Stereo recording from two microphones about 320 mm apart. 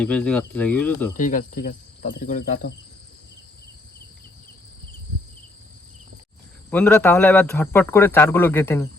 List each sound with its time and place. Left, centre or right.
0.0 s speech: centre
1.1 s speech: left
6.7 s speech: centre